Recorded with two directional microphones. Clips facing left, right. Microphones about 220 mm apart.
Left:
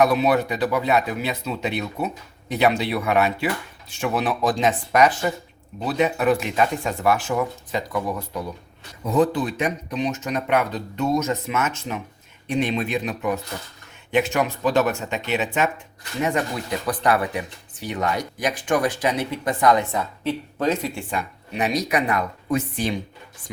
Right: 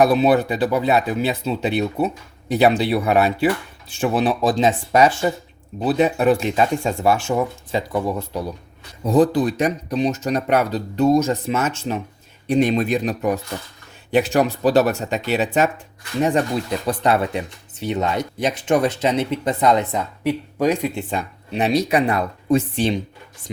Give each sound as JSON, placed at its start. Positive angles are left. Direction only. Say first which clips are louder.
{"t": 0.0, "sound": "speech", "louder": "right 3 dB", "side_deg": -30}
{"t": 12.5, "sound": "speech", "louder": "right 6 dB", "side_deg": -40}
{"t": 16.8, "sound": "speech", "louder": "right 1 dB", "side_deg": -25}